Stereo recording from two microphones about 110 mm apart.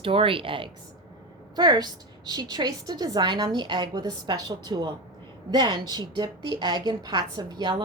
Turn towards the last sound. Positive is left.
turn(degrees=-40)  # may be behind; listen again after turning